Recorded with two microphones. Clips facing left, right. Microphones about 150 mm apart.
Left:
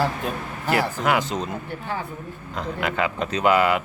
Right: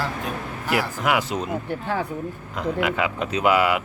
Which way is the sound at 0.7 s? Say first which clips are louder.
Left 1 dB; 10° right (ahead or behind).